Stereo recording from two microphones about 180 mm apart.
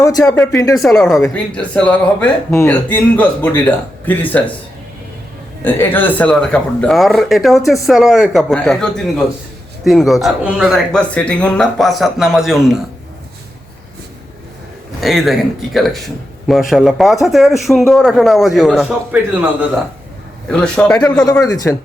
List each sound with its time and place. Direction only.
0.0 s speech: 20° left (ahead or behind)
0.8 s speech: centre (ahead or behind)
5.6 s speech: 10° left (ahead or behind)
15.0 s speech: centre (ahead or behind)
20.5 s speech: 5° left (ahead or behind)
21.4 s speech: 20° left (ahead or behind)